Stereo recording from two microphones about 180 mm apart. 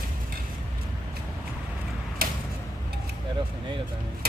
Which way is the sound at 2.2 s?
55° right (ahead or behind).